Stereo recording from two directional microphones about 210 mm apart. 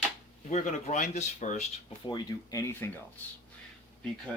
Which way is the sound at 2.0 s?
20° left (ahead or behind).